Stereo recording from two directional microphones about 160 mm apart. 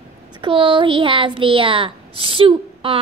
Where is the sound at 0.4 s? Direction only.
35° right (ahead or behind).